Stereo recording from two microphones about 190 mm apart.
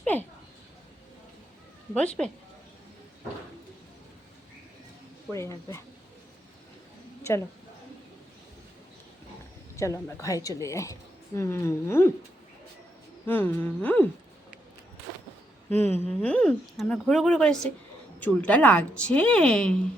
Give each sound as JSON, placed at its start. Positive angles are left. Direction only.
{"t": 0.0, "sound": "speech", "side_deg": 10}
{"t": 1.9, "sound": "speech", "side_deg": 5}
{"t": 5.3, "sound": "a woman's voice", "side_deg": 15}
{"t": 7.2, "sound": "speech", "side_deg": 15}
{"t": 9.7, "sound": "a woman's voice", "side_deg": 15}
{"t": 13.2, "sound": "a woman's voice", "side_deg": 10}
{"t": 15.7, "sound": "speech", "side_deg": 10}